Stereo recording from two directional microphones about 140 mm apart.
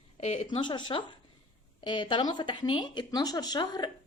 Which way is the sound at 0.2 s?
45° left (ahead or behind).